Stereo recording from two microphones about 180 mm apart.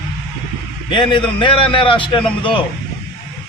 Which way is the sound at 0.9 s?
30° left (ahead or behind).